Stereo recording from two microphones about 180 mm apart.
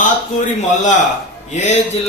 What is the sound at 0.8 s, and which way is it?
Speech, 45° left (ahead or behind).